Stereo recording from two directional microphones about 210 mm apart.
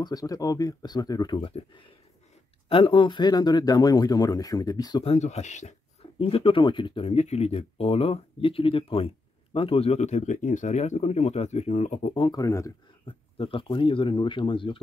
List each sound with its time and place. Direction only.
0.0 s speech: 15° left (ahead or behind)